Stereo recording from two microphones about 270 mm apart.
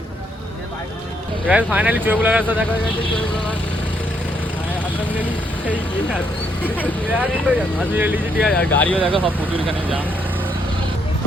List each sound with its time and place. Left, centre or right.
1.5 s speech: centre
6.7 s speech: centre
9.1 s speech: centre